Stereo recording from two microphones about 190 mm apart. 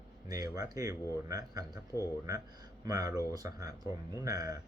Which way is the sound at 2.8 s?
20° right (ahead or behind).